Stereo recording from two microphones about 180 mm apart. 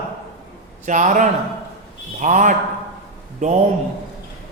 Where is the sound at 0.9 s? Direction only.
45° right (ahead or behind).